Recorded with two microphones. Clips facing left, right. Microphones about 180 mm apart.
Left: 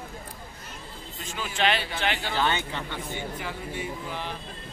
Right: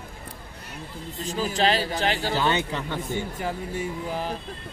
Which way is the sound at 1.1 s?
35° right (ahead or behind).